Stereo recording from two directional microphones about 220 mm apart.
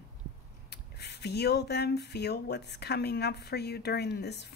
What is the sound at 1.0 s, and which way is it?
Speech, 50° left (ahead or behind).